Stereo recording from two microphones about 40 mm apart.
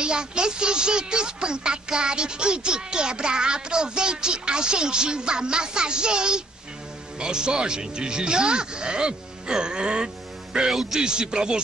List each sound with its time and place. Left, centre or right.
0.0 s speech: right
10.7 s speech: centre
11.0 s speech: right